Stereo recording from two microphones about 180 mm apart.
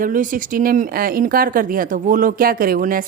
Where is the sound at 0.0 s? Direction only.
50° right (ahead or behind).